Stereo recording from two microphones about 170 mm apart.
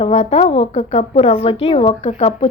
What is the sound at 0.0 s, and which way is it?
A woman's voice, 35° left (ahead or behind).